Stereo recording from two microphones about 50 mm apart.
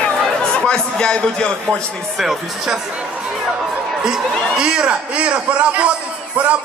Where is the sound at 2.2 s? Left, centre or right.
Centre.